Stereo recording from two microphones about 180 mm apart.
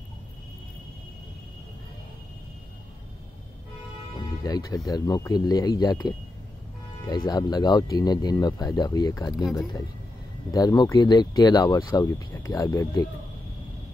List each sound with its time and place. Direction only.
4.4 s speech: 20° left (ahead or behind)
9.4 s speech: centre (ahead or behind)
10.5 s speech: 20° left (ahead or behind)